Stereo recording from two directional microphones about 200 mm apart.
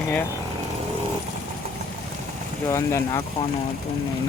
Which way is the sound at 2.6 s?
15° left (ahead or behind).